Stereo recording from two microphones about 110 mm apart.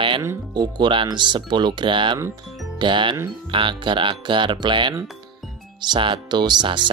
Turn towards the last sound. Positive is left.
turn(degrees=-45)  # may be behind; listen again after turning